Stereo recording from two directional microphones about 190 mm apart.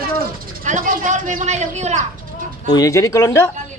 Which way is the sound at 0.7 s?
40° right (ahead or behind).